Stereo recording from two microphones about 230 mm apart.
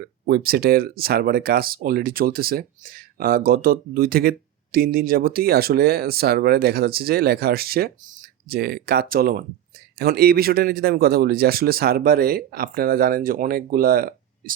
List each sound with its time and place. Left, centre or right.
0.0 s speech: right